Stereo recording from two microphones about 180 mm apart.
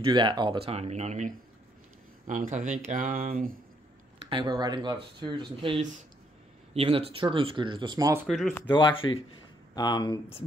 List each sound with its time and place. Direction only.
0.0 s speech: 25° right (ahead or behind); by 3.5 s 50° right (ahead or behind)
4.3 s speech: 25° right (ahead or behind)
6.7 s speech: 35° right (ahead or behind)
8.3 s speech: centre (ahead or behind)
8.7 s speech: 25° left (ahead or behind)